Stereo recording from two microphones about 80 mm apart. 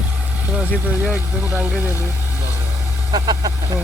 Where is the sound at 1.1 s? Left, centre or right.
Right.